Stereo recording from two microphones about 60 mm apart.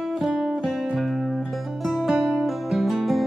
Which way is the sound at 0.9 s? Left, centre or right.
Centre.